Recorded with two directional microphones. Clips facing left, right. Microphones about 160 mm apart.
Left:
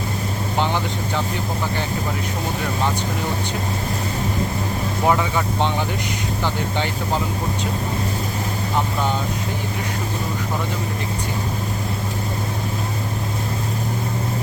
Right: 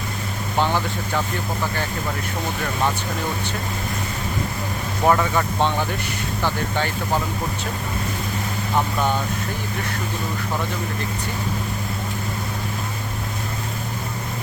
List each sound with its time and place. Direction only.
0.6 s speech: 15° left (ahead or behind)
5.0 s speech: 10° left (ahead or behind)